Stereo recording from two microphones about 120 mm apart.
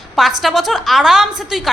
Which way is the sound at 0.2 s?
Centre (ahead or behind).